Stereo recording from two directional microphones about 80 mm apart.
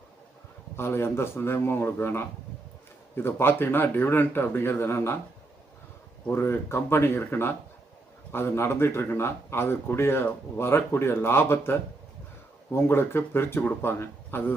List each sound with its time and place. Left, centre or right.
0.8 s a man's voice: left
6.3 s a man's voice: left